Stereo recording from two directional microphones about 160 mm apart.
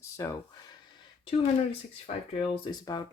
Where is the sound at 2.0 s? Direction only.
35° left (ahead or behind).